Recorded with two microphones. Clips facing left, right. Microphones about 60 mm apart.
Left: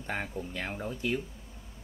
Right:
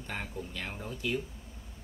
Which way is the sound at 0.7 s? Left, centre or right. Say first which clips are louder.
Left 4 dB; left.